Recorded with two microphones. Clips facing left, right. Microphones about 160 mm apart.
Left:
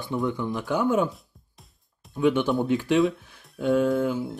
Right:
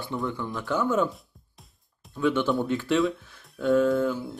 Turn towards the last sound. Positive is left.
turn(degrees=15)  # may be behind; listen again after turning